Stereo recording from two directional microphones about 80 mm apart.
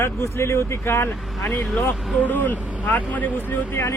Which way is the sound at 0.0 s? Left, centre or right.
Left.